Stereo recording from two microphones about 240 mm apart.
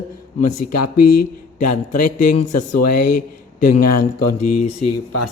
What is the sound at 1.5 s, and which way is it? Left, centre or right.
Speech, left.